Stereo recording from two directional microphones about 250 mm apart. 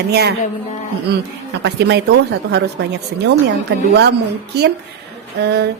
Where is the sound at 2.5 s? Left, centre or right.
Right.